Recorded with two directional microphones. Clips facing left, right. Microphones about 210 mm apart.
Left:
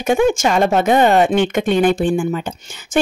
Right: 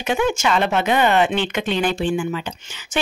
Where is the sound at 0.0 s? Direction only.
50° left (ahead or behind).